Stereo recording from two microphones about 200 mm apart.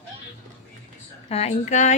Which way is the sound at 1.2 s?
30° left (ahead or behind).